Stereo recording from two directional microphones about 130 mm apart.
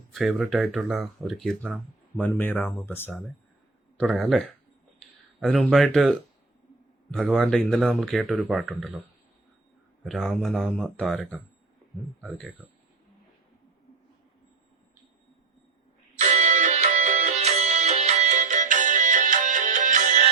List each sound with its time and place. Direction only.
0.1 s speech: centre (ahead or behind)
2.1 s speech: 15° left (ahead or behind)
3.9 s speech: centre (ahead or behind)
7.2 s speech: 5° left (ahead or behind)
10.1 s speech: centre (ahead or behind)
12.6 s speech: 5° right (ahead or behind)
16.1 s music: 70° right (ahead or behind)